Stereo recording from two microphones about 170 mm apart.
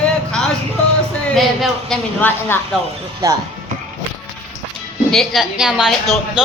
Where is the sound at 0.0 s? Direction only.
5° left (ahead or behind).